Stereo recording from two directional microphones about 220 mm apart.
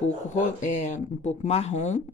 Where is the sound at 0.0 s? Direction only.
35° left (ahead or behind).